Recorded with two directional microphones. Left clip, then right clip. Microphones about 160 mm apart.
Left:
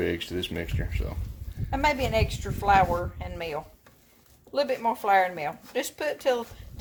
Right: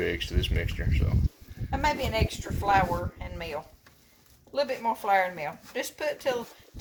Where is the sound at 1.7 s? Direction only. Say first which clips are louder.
Left 3 dB; 55° left (ahead or behind).